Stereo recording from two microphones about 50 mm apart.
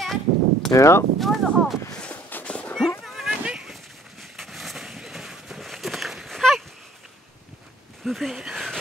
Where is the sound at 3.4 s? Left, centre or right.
Centre.